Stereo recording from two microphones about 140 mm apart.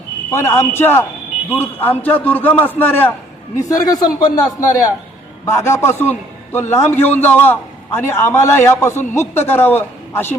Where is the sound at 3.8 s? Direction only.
25° left (ahead or behind).